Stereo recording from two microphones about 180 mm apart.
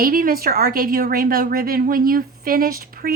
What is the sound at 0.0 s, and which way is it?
Speech, 55° right (ahead or behind).